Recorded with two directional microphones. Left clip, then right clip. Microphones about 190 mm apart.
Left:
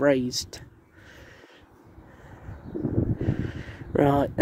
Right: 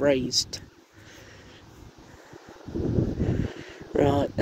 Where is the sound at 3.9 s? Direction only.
40° left (ahead or behind).